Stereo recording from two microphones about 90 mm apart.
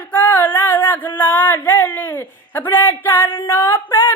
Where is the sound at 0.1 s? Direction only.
15° left (ahead or behind).